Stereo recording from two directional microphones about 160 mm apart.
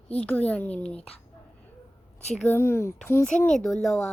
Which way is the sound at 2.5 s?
15° left (ahead or behind).